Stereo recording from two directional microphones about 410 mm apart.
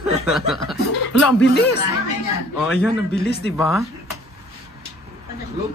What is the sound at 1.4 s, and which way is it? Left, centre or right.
Speech, left.